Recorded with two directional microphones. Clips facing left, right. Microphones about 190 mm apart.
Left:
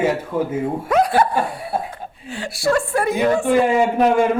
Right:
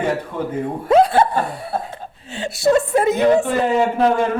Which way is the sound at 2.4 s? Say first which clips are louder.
Right 3 dB; 20° right (ahead or behind).